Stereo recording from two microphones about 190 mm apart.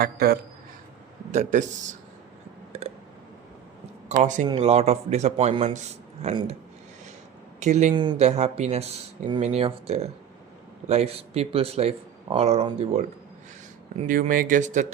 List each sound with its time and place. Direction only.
0.0 s speech: 55° right (ahead or behind)
1.3 s speech: 40° right (ahead or behind)
2.7 s a sound: 35° right (ahead or behind)
4.1 s speech: 40° right (ahead or behind)
4.4 s speech: 30° right (ahead or behind)
7.6 s speech: 40° right (ahead or behind)
13.9 s speech: 45° right (ahead or behind)